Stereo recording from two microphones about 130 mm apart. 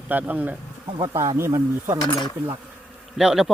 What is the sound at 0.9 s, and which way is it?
Speech, 30° right (ahead or behind).